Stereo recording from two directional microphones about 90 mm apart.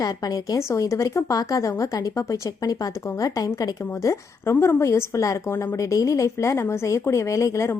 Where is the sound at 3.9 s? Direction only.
35° left (ahead or behind).